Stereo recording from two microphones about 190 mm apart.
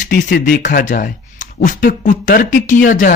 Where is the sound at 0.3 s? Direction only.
55° left (ahead or behind).